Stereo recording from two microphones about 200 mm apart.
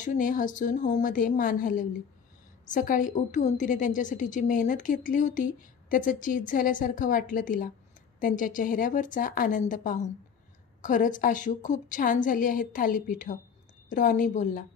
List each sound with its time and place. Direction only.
0.0 s a woman's voice: 40° left (ahead or behind)